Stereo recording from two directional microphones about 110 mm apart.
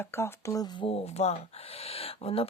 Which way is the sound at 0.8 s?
60° left (ahead or behind).